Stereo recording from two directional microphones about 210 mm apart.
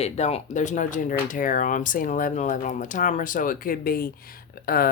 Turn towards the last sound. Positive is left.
turn(degrees=45)  # may be behind; listen again after turning